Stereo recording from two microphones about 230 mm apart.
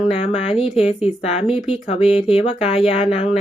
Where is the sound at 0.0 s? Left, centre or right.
Left.